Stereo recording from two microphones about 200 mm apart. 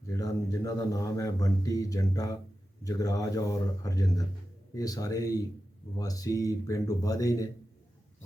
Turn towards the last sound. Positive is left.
turn(degrees=15)  # may be behind; listen again after turning